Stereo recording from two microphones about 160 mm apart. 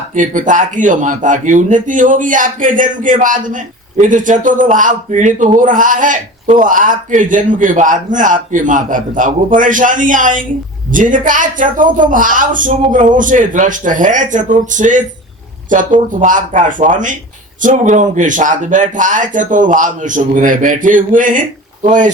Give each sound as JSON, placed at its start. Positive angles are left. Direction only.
{"t": 0.2, "sound": "a woman's voice", "side_deg": -55}